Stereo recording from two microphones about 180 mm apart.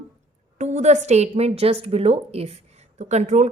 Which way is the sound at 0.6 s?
40° right (ahead or behind).